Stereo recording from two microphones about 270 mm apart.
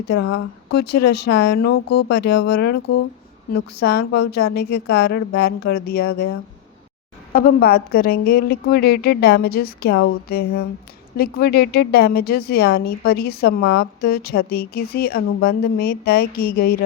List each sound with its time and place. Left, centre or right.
0.1 s a woman's voice: left
3.8 s a woman's voice: left
7.3 s a woman's voice: left